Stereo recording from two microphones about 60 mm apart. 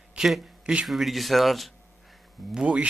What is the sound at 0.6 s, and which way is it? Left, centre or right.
Speech, centre.